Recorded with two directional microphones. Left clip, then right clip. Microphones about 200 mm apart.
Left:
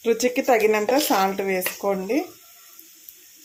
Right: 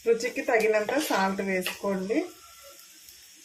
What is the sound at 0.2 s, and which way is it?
Speech, 45° left (ahead or behind).